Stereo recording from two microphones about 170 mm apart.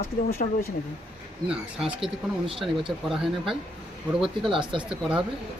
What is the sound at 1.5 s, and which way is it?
Speech, 5° right (ahead or behind).